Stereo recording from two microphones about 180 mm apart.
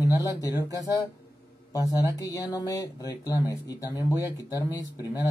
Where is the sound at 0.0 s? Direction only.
20° left (ahead or behind).